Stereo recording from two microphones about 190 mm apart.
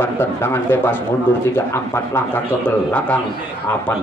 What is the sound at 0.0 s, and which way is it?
Speech, 10° left (ahead or behind).